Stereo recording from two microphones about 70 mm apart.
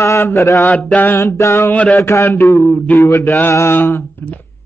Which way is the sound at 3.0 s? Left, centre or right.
Left.